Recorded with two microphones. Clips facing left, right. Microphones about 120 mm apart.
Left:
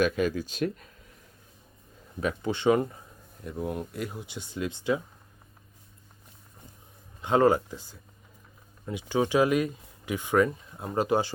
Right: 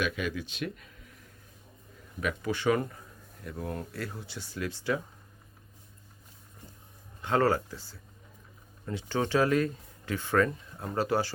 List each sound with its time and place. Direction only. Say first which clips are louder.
0.0 s speech: left 6 dB; 40° left (ahead or behind)
2.2 s speech: left 3 dB; 25° left (ahead or behind)
7.2 s speech: left 4 dB; 20° left (ahead or behind)